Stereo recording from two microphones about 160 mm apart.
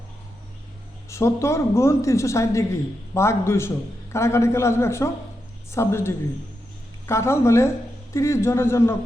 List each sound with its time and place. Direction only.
1.1 s a woman's voice: 20° left (ahead or behind)